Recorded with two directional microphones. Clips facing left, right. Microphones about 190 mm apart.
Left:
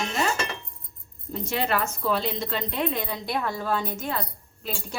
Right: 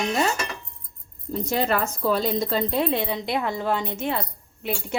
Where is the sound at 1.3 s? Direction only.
40° right (ahead or behind).